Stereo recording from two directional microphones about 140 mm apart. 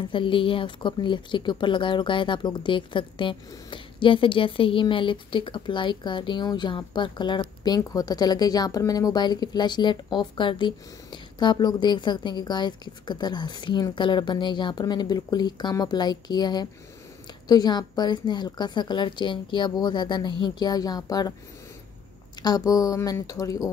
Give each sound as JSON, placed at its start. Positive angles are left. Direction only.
{"t": 0.1, "sound": "a woman's voice", "side_deg": 35}
{"t": 22.4, "sound": "speech", "side_deg": 30}